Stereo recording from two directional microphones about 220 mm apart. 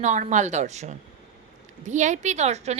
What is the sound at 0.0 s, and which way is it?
A woman's voice, 35° right (ahead or behind).